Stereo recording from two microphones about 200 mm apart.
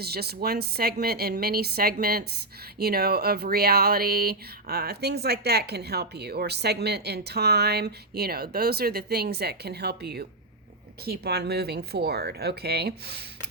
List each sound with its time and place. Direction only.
0.0 s speech: 55° right (ahead or behind)